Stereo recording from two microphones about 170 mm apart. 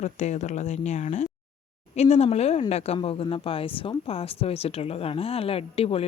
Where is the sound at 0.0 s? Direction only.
45° left (ahead or behind).